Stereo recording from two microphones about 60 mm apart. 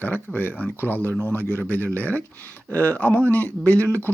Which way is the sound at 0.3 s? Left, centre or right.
Left.